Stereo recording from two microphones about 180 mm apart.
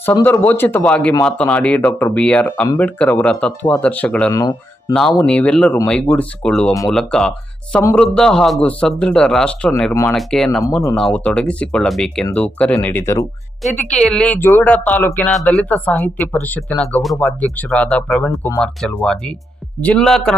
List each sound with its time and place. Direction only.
0.0 s speech: 10° left (ahead or behind)
4.3 s speech: 20° left (ahead or behind)
4.9 s a man's voice: centre (ahead or behind)